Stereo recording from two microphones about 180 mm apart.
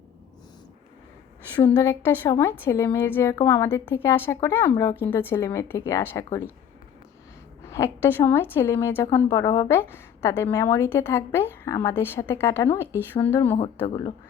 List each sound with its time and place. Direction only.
1.6 s a woman's voice: 20° left (ahead or behind)
7.6 s a sound: 15° left (ahead or behind)
8.0 s a woman's voice: 15° left (ahead or behind)